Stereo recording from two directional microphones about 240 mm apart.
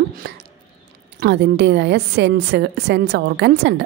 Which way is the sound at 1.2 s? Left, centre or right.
Right.